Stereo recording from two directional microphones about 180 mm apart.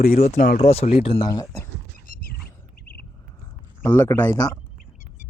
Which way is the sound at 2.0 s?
50° left (ahead or behind).